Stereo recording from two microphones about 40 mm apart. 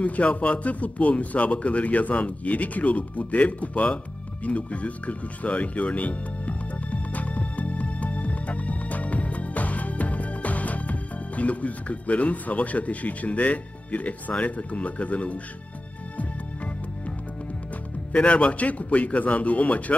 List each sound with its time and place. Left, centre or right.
0.0 s speech: left
18.1 s a man's voice: left